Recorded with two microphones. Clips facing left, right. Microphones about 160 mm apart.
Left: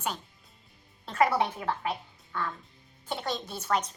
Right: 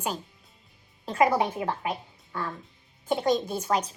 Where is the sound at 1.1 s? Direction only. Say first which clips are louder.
Right 2 dB; 10° right (ahead or behind).